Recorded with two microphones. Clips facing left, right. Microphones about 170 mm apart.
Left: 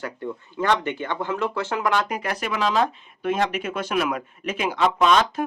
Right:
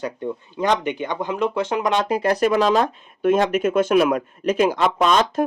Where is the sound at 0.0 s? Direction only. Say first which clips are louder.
Right 4 dB; 20° right (ahead or behind).